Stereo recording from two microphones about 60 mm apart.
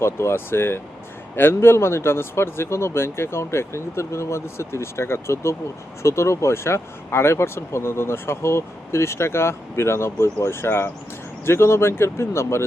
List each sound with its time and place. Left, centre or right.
0.0 s speech: left